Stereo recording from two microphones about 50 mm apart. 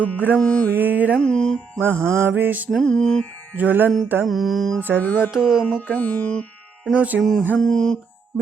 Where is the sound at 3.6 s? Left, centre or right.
Right.